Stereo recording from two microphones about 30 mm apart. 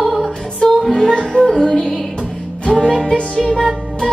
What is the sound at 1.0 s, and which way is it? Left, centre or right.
Music, left.